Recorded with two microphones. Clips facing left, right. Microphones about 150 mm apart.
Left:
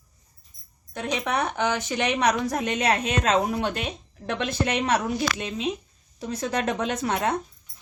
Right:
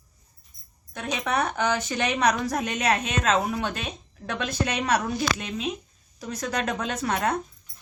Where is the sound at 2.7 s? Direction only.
30° left (ahead or behind).